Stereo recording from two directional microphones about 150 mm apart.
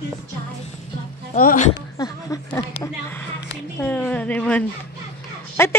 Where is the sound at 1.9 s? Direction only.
25° left (ahead or behind).